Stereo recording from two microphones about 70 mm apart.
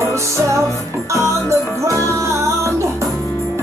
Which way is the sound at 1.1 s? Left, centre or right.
Right.